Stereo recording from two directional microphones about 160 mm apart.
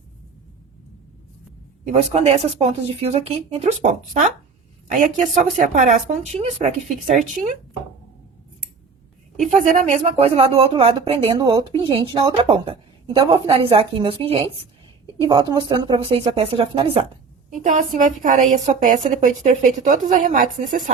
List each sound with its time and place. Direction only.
1.9 s a woman's voice: 40° right (ahead or behind)
9.5 s speech: 50° right (ahead or behind)
17.5 s a woman's voice: 55° right (ahead or behind)